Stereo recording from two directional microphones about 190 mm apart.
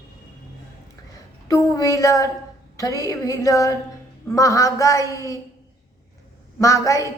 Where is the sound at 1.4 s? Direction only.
15° left (ahead or behind).